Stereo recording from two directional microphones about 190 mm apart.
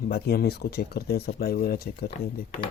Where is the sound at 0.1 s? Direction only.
55° left (ahead or behind).